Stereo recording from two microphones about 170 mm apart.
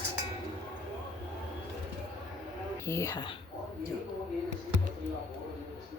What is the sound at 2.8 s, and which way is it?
Speech, 15° left (ahead or behind).